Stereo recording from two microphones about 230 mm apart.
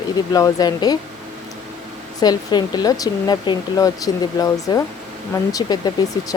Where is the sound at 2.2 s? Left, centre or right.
Centre.